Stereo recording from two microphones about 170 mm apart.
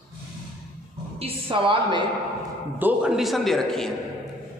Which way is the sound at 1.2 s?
30° right (ahead or behind).